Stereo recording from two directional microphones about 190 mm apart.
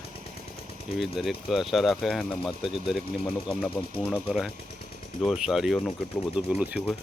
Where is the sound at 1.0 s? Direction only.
Centre (ahead or behind).